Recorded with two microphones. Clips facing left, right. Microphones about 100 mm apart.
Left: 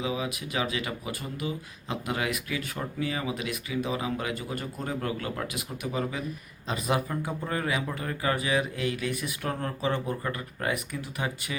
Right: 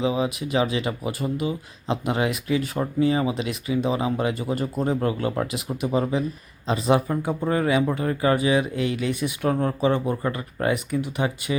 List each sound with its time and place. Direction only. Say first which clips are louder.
0.0 s speech: right 7 dB; 25° right (ahead or behind)